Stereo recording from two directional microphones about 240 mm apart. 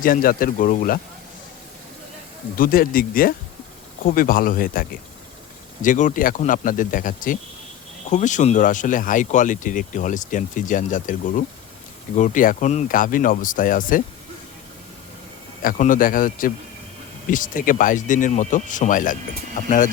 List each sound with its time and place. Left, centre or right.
0.0 s speech: left
2.6 s speech: left
15.6 s speech: left